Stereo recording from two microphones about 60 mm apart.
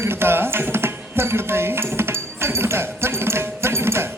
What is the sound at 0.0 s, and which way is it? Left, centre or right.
Music, right.